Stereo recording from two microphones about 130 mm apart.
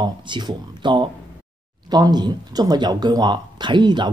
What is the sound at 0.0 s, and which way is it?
Speech, 35° right (ahead or behind).